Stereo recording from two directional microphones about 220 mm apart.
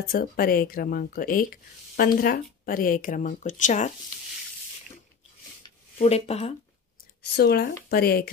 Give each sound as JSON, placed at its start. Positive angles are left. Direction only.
{"t": 0.1, "sound": "speech", "side_deg": 40}
{"t": 5.9, "sound": "speech", "side_deg": 30}
{"t": 7.3, "sound": "speech", "side_deg": 45}